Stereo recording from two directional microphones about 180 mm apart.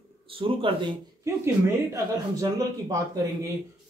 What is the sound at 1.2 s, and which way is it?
Speech, 15° right (ahead or behind).